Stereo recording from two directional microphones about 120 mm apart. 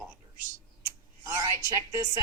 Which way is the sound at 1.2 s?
25° right (ahead or behind).